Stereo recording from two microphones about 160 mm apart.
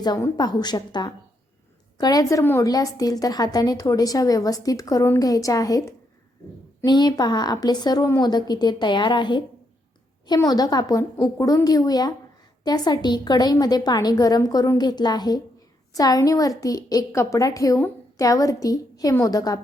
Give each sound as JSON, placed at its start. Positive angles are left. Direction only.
{"t": 0.0, "sound": "a woman's voice", "side_deg": 25}
{"t": 2.4, "sound": "a woman's voice", "side_deg": 15}
{"t": 2.6, "sound": "a woman's voice", "side_deg": 25}